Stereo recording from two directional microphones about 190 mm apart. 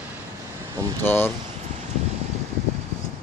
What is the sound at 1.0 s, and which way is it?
Speech, 10° left (ahead or behind).